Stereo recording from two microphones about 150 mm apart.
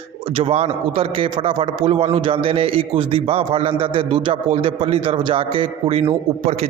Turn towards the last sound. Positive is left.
turn(degrees=-40)  # may be behind; listen again after turning